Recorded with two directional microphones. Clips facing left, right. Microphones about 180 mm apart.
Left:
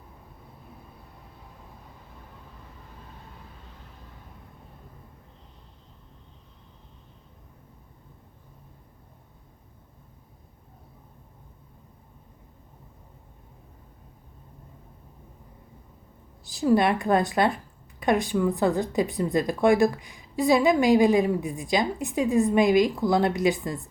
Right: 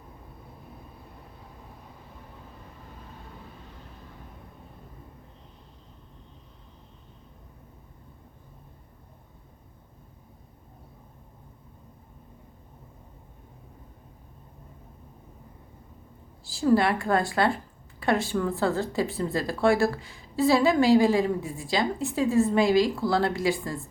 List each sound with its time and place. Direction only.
16.4 s a woman's voice: 20° left (ahead or behind)